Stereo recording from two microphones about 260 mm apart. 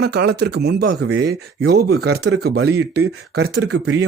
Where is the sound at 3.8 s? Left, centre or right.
Right.